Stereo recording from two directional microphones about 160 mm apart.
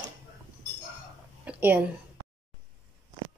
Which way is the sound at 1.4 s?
10° right (ahead or behind).